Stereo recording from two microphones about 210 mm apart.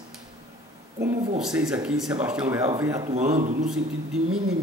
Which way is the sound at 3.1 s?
35° right (ahead or behind).